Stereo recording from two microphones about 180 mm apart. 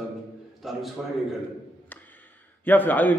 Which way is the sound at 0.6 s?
Centre (ahead or behind).